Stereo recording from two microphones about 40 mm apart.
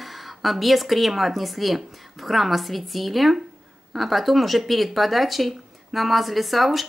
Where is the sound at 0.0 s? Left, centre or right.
Centre.